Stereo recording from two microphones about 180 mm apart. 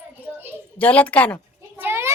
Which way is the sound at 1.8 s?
15° right (ahead or behind).